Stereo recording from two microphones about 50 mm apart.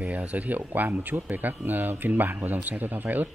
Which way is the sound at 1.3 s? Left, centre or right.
Right.